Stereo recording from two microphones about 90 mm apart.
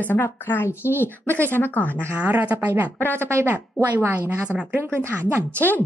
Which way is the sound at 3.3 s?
25° right (ahead or behind).